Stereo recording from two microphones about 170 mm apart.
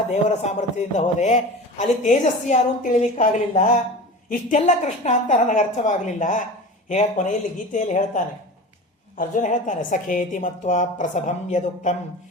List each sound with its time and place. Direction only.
0.1 s a woman's voice: 40° left (ahead or behind)